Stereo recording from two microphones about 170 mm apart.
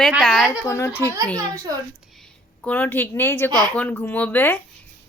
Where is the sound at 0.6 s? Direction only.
15° left (ahead or behind).